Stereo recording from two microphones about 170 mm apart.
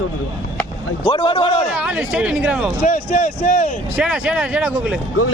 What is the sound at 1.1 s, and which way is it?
Speech, 30° left (ahead or behind).